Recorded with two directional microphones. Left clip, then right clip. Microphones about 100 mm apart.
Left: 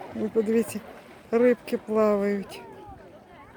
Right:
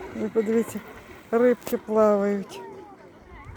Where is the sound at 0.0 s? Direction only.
50° left (ahead or behind).